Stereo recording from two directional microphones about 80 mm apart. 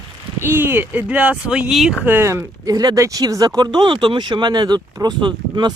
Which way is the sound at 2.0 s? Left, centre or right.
Right.